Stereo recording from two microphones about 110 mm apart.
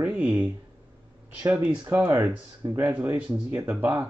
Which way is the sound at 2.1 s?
25° right (ahead or behind).